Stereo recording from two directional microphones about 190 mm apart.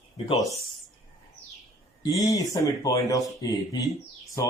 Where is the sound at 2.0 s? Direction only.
20° left (ahead or behind).